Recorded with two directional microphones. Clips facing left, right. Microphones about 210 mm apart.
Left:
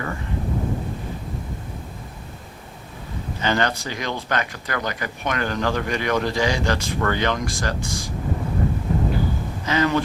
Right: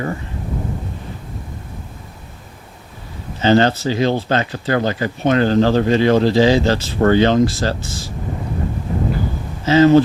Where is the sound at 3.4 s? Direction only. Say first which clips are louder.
Right 9 dB; 25° right (ahead or behind).